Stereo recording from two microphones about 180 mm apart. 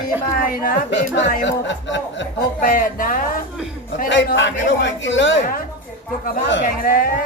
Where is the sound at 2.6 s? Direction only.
50° left (ahead or behind).